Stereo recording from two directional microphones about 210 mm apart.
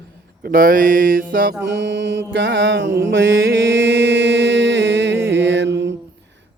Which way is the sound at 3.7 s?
60° right (ahead or behind).